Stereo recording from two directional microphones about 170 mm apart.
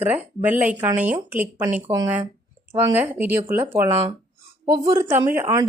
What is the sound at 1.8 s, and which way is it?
Speech, 25° right (ahead or behind).